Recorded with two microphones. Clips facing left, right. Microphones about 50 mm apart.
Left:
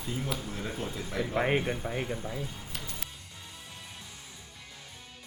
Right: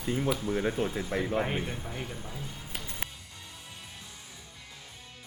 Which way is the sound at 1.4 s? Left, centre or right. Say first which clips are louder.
Left 3 dB; left.